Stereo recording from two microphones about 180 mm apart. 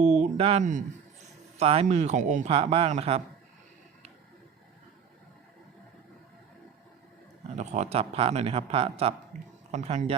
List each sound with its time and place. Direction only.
0.0 s speech: 40° right (ahead or behind)
7.5 s speech: 40° right (ahead or behind)
9.3 s speech: 45° right (ahead or behind)